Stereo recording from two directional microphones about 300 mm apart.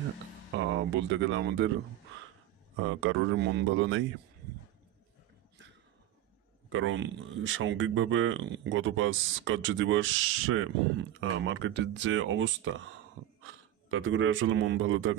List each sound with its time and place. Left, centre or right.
0.6 s speech: right
3.0 s speech: right
6.7 s speech: right
13.8 s speech: right